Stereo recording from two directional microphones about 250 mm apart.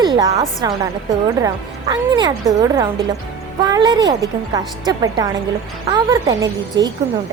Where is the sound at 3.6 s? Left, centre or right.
Centre.